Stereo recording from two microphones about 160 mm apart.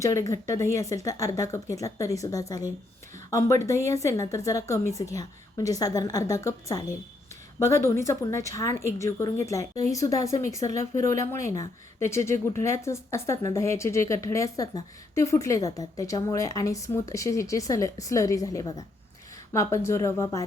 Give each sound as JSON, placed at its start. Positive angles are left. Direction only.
{"t": 0.0, "sound": "a woman's voice", "side_deg": 20}